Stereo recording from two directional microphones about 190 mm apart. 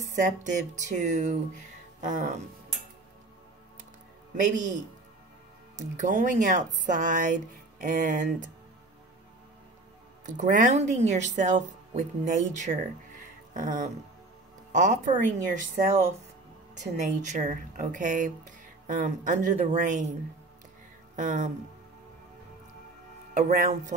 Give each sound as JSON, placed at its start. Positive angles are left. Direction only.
{"t": 0.0, "sound": "speech", "side_deg": -40}
{"t": 5.8, "sound": "speech", "side_deg": -40}
{"t": 10.2, "sound": "speech", "side_deg": -40}
{"t": 17.2, "sound": "speech", "side_deg": -40}
{"t": 21.2, "sound": "speech", "side_deg": -40}
{"t": 23.3, "sound": "speech", "side_deg": -45}